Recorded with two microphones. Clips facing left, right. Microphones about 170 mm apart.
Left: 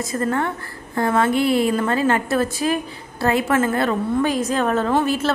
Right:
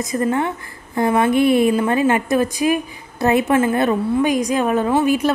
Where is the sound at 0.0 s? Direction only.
15° right (ahead or behind).